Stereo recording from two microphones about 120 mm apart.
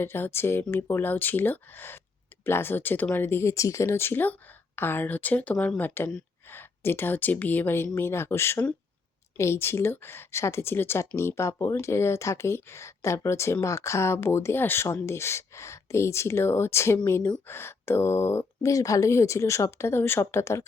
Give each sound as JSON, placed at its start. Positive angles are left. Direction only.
{"t": 0.0, "sound": "speech", "side_deg": 20}